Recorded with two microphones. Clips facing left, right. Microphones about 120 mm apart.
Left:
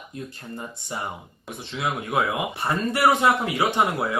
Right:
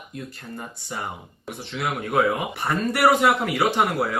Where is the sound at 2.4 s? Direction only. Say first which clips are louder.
Even; 20° left (ahead or behind).